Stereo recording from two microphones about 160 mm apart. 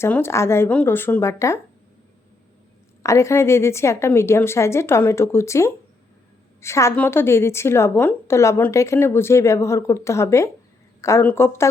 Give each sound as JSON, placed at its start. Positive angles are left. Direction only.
{"t": 0.0, "sound": "a woman's voice", "side_deg": 15}
{"t": 3.0, "sound": "a woman's voice", "side_deg": 20}